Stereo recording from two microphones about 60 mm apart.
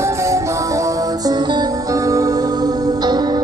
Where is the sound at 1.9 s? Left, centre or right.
Right.